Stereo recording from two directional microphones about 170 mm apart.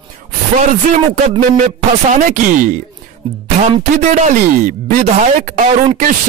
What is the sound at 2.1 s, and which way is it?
Speech, 50° right (ahead or behind).